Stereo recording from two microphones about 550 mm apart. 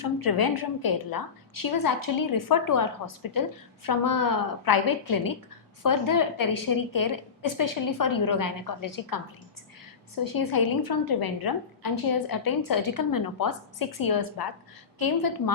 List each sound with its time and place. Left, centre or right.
0.0 s a woman's voice: left
10.2 s a woman's voice: left